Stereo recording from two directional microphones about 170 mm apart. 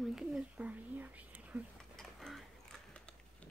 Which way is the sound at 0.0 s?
5° right (ahead or behind).